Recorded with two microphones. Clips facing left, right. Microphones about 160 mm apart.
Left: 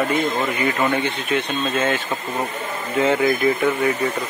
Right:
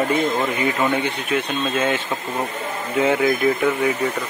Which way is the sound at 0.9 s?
10° right (ahead or behind).